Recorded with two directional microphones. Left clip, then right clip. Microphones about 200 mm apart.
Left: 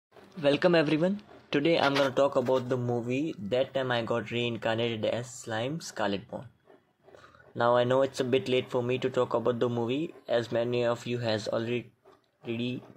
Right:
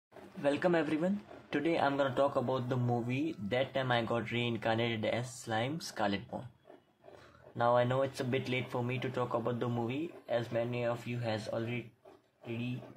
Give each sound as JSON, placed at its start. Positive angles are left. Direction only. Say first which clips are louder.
{"t": 0.4, "sound": "speech", "louder": "left 7 dB", "side_deg": 20}
{"t": 7.5, "sound": "speech", "louder": "left 5 dB", "side_deg": 25}